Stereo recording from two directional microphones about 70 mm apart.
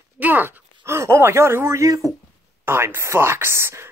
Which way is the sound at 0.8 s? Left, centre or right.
Right.